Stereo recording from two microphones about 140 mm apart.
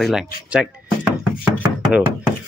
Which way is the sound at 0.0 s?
5° right (ahead or behind).